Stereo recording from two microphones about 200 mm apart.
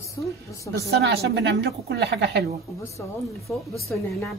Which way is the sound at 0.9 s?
55° right (ahead or behind).